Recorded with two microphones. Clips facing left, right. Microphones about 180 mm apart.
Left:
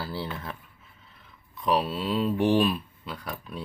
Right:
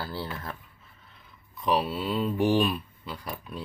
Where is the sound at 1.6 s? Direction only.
Centre (ahead or behind).